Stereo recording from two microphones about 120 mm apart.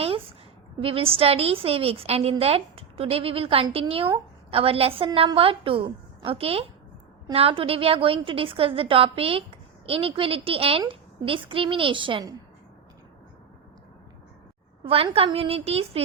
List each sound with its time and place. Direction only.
0.8 s a woman's voice: 50° right (ahead or behind)
15.1 s a woman's voice: 55° right (ahead or behind)